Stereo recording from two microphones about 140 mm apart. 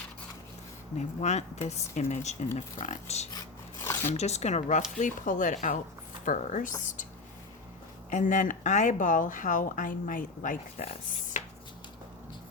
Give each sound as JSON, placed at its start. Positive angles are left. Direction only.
{"t": 0.9, "sound": "speech", "side_deg": 55}
{"t": 3.3, "sound": "rub", "side_deg": 20}
{"t": 4.1, "sound": "speech", "side_deg": 50}
{"t": 4.9, "sound": "speech", "side_deg": 65}
{"t": 8.1, "sound": "speech", "side_deg": 65}
{"t": 11.3, "sound": "a sound", "side_deg": 65}